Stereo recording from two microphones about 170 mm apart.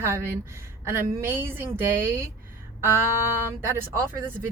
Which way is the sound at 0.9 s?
15° right (ahead or behind).